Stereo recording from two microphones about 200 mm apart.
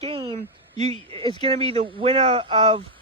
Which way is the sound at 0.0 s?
25° right (ahead or behind).